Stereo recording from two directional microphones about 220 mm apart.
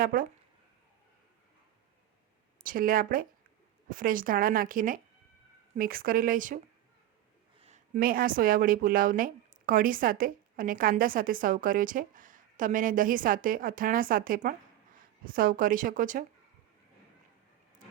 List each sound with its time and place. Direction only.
0.0 s a woman's voice: 40° right (ahead or behind)
2.6 s a woman's voice: 40° right (ahead or behind)
7.9 s a woman's voice: 40° right (ahead or behind)